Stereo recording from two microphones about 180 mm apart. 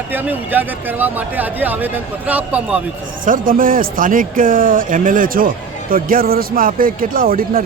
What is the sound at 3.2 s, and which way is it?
Speech, 50° right (ahead or behind).